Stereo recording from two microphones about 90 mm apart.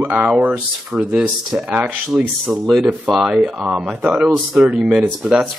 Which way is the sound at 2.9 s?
15° right (ahead or behind).